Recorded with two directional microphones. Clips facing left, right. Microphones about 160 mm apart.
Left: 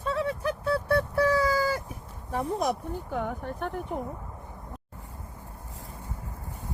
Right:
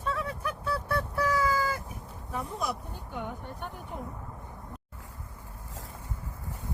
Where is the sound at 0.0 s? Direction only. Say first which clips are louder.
Left 5 dB; 30° left (ahead or behind).